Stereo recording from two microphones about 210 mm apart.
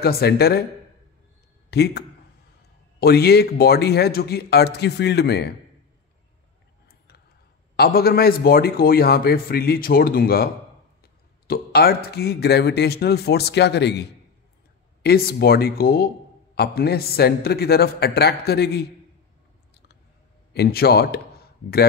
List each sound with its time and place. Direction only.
0.0 s speech: 50° left (ahead or behind)
1.7 s speech: 55° left (ahead or behind)
7.7 s speech: 45° left (ahead or behind)
15.0 s speech: 50° left (ahead or behind)
20.5 s speech: 50° left (ahead or behind)